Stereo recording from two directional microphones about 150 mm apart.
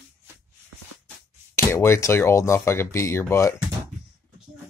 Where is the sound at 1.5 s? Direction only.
15° left (ahead or behind).